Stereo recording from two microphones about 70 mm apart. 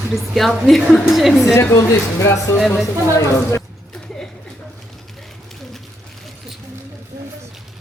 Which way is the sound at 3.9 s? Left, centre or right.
Centre.